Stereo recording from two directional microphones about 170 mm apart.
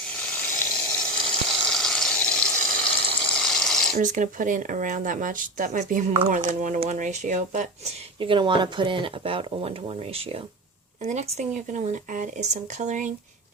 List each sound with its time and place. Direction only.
0.1 s water: 10° left (ahead or behind)
3.9 s speech: 50° right (ahead or behind)
8.2 s speech: 30° right (ahead or behind)